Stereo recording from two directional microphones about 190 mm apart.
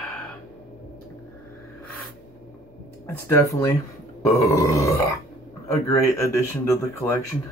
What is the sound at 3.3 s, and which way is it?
Speech, 15° left (ahead or behind).